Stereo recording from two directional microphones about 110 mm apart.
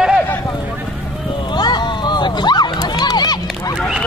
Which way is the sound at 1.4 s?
40° left (ahead or behind).